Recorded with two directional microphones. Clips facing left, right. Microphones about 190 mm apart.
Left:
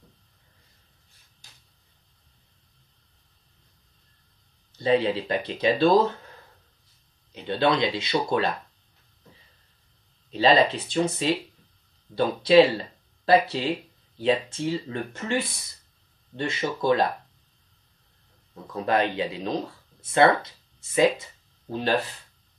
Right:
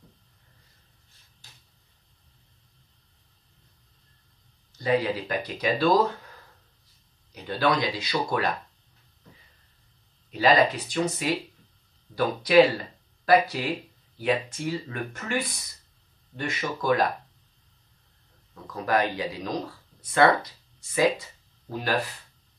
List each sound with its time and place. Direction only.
4.7 s speech: 25° left (ahead or behind)
7.3 s speech: 25° left (ahead or behind)
10.3 s speech: 25° left (ahead or behind)
18.5 s speech: 25° left (ahead or behind)